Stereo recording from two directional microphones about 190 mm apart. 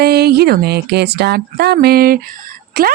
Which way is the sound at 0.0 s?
55° right (ahead or behind).